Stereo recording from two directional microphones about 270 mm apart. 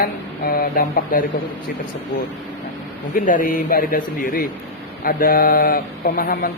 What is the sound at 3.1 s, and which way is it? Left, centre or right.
Speech, left.